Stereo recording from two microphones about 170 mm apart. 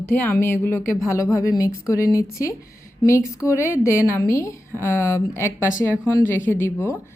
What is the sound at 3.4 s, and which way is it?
Speech, 10° right (ahead or behind).